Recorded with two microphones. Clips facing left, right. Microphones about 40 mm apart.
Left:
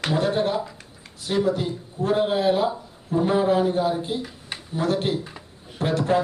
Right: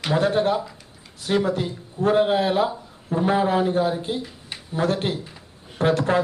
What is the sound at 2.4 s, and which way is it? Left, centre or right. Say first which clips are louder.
Speech: left 1 dB; centre.